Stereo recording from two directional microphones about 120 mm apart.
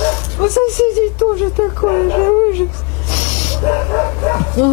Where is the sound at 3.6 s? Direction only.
15° left (ahead or behind).